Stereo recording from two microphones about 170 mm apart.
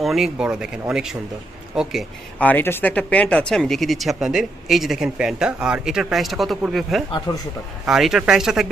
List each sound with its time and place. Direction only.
0.0 s speech: centre (ahead or behind)
2.4 s speech: 10° left (ahead or behind)
7.3 s speech: 20° left (ahead or behind)
7.9 s speech: centre (ahead or behind)